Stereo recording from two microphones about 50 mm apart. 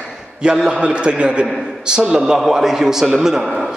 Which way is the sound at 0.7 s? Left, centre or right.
Centre.